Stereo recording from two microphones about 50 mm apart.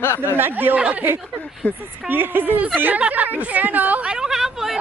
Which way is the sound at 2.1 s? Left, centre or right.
Right.